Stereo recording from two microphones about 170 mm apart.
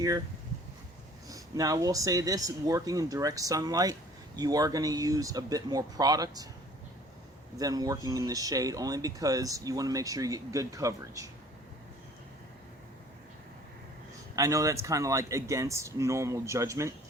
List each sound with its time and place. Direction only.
1.3 s speech: 20° right (ahead or behind)
7.5 s speech: 20° right (ahead or behind)
14.3 s speech: 20° right (ahead or behind)